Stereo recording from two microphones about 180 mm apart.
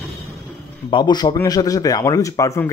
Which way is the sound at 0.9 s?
25° left (ahead or behind).